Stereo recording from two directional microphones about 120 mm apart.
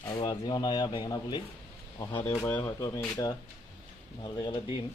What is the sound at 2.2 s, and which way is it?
Speech, 15° left (ahead or behind).